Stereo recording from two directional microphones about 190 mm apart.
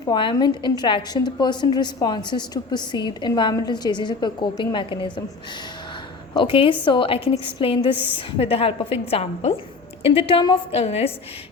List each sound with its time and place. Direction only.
0.1 s a woman's voice: 25° left (ahead or behind)
6.3 s a woman's voice: 25° left (ahead or behind)